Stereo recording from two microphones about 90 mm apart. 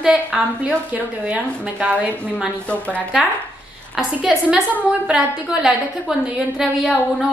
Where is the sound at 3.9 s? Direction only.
5° right (ahead or behind).